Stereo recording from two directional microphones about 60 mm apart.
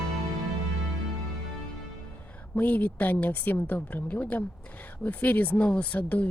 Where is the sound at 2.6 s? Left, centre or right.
Left.